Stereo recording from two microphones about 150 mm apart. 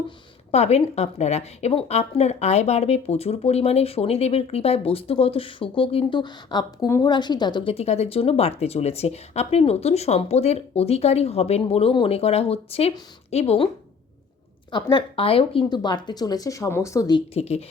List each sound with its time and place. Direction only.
0.5 s a woman's voice: 45° left (ahead or behind)
14.7 s speech: 30° left (ahead or behind)
17.3 s a woman's voice: 45° left (ahead or behind)